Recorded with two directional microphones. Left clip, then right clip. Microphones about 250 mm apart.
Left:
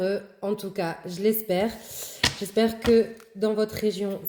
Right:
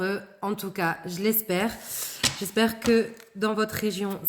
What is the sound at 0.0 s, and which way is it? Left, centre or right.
Speech, right.